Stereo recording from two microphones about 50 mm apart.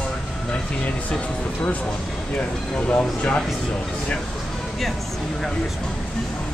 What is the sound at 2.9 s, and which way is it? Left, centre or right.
Speech, left.